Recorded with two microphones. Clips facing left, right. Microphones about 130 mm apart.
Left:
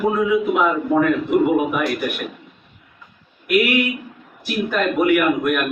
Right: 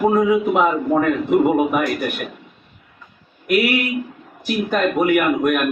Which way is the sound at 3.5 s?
40° right (ahead or behind).